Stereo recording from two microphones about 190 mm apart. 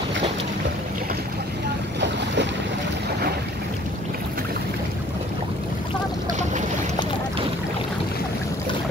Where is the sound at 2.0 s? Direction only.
65° right (ahead or behind).